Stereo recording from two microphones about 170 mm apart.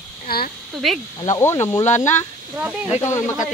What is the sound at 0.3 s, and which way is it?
Speech, 65° left (ahead or behind).